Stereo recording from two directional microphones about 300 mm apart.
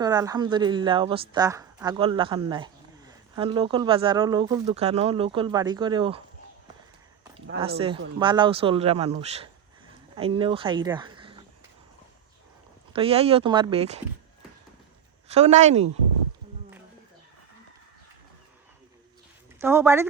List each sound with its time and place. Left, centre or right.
0.0 s speech: centre
8.2 s speech: centre
12.9 s speech: centre
15.3 s speech: right
19.5 s speech: centre